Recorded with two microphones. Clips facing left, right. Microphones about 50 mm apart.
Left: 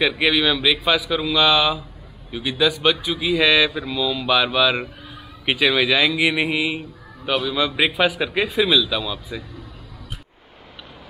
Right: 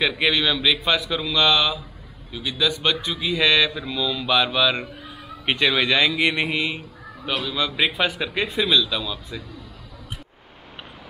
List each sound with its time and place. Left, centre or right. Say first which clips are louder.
0.0 s a man's voice: left 2 dB; centre